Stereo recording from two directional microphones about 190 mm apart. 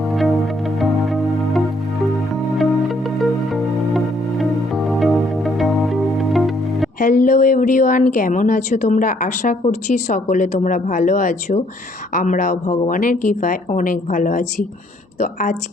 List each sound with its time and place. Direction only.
0.1 s music: centre (ahead or behind)
7.0 s a sound: 45° left (ahead or behind)
9.6 s speech: 40° left (ahead or behind)